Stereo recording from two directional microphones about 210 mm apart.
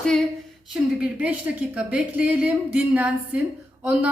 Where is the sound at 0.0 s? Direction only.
Centre (ahead or behind).